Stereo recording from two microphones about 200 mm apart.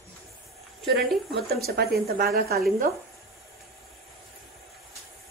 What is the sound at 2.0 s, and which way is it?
Speech, 50° right (ahead or behind).